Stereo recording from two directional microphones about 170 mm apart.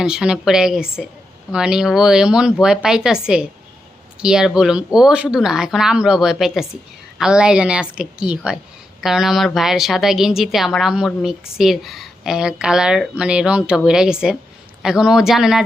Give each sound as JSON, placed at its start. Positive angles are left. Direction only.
{"t": 0.0, "sound": "a woman's voice", "side_deg": -5}